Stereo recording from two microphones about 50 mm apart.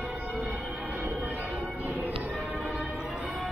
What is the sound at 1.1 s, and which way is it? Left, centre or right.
Music, right.